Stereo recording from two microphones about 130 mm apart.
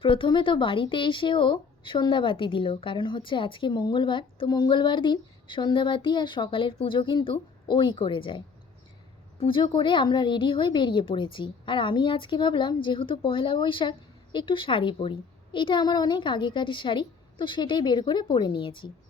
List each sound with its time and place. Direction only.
0.0 s a woman's voice: 40° left (ahead or behind)
9.4 s a woman's voice: 45° left (ahead or behind)